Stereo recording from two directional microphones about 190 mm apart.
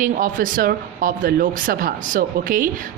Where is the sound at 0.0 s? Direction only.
45° right (ahead or behind).